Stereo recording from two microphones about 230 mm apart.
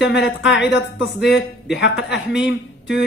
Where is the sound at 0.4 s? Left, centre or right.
Left.